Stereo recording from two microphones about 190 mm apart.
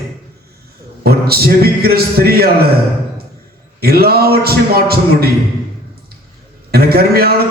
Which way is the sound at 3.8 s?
55° right (ahead or behind).